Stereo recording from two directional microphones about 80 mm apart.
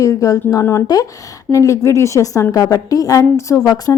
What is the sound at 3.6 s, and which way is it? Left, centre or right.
Speech, left.